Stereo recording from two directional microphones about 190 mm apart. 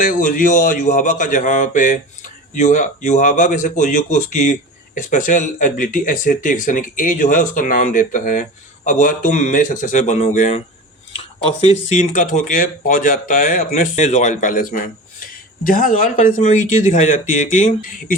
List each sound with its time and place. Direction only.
0.0 s speech: 45° left (ahead or behind)